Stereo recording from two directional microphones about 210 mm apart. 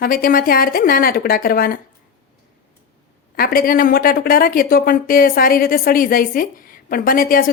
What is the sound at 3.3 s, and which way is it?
Speech, 45° left (ahead or behind).